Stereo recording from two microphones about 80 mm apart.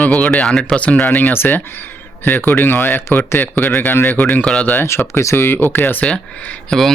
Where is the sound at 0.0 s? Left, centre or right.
Centre; by 3.2 s left.